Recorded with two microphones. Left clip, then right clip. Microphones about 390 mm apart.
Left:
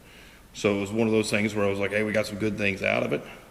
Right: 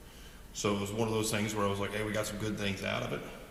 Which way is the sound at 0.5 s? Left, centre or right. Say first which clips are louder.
Left 8 dB; right.